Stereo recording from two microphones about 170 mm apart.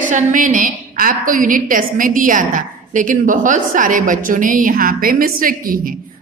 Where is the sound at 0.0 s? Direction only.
50° right (ahead or behind).